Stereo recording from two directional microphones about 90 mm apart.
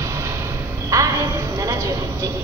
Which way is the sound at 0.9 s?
35° right (ahead or behind).